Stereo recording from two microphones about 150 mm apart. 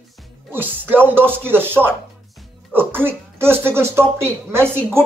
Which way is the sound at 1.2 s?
15° right (ahead or behind).